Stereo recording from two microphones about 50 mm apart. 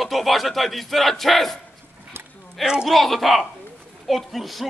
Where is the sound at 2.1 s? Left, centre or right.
Right.